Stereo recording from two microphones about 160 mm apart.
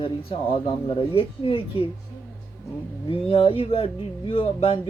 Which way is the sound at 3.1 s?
35° left (ahead or behind).